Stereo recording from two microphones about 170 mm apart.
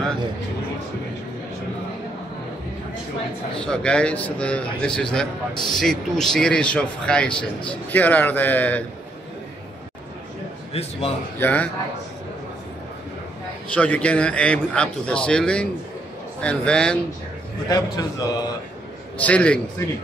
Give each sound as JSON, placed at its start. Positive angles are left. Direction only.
{"t": 3.5, "sound": "a man's voice", "side_deg": 5}
{"t": 5.5, "sound": "a man's voice", "side_deg": 25}
{"t": 5.8, "sound": "a man's voice", "side_deg": 5}
{"t": 10.7, "sound": "a man's voice", "side_deg": 35}
{"t": 11.3, "sound": "a man's voice", "side_deg": 10}
{"t": 13.7, "sound": "a man's voice", "side_deg": 10}
{"t": 17.6, "sound": "a man's voice", "side_deg": 20}
{"t": 19.1, "sound": "a man's voice", "side_deg": 10}